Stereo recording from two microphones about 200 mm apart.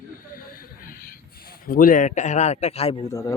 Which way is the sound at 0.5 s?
45° left (ahead or behind).